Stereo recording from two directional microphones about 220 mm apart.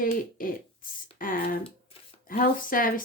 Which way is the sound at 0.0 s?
40° left (ahead or behind).